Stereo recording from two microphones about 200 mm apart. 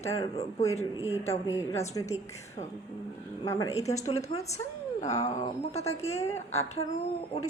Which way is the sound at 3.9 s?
35° left (ahead or behind).